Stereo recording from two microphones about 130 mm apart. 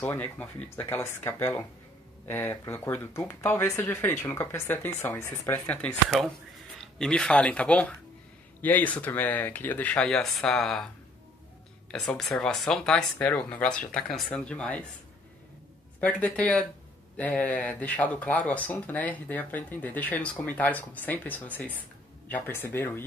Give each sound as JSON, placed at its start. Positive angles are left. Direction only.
{"t": 0.0, "sound": "speech", "side_deg": 10}
{"t": 11.9, "sound": "speech", "side_deg": 0}
{"t": 16.0, "sound": "speech", "side_deg": 10}